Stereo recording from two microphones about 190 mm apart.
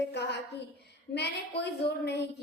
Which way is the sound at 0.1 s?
60° left (ahead or behind).